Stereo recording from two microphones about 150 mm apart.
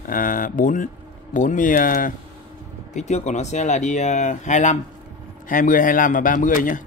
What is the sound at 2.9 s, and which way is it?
Speech, 50° left (ahead or behind).